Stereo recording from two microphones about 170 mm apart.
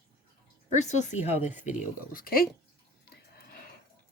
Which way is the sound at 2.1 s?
60° left (ahead or behind).